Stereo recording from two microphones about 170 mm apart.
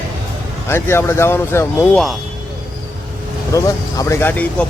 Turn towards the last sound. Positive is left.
turn(degrees=10)  # may be behind; listen again after turning